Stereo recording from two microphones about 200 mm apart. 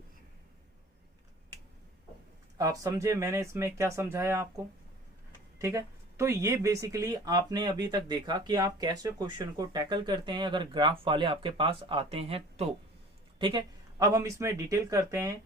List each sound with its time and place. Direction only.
2.6 s speech: 15° right (ahead or behind)
5.5 s speech: 15° right (ahead or behind)